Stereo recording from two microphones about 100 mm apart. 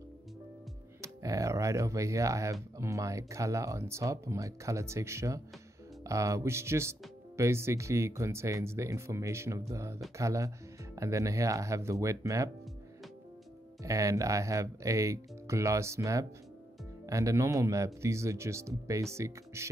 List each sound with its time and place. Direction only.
1.0 s speech: 35° right (ahead or behind)
13.8 s speech: 35° right (ahead or behind)